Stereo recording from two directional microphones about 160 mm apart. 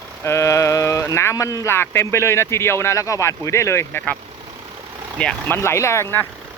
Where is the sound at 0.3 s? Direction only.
20° left (ahead or behind).